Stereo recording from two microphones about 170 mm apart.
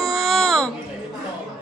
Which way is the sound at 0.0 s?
Centre (ahead or behind).